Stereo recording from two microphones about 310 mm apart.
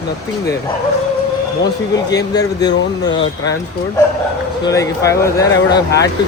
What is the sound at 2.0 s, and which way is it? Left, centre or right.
Speech, centre.